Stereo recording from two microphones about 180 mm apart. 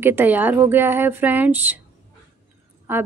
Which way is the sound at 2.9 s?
10° right (ahead or behind).